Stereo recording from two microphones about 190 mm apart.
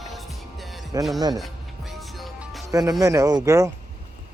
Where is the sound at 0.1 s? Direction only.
Centre (ahead or behind).